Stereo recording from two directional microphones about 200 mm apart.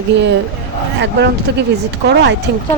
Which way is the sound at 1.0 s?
55° right (ahead or behind).